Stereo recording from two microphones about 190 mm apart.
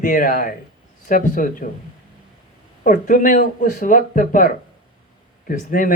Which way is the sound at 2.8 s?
45° left (ahead or behind).